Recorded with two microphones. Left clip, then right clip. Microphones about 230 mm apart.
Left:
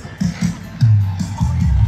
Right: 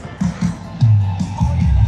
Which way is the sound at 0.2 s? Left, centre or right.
Left.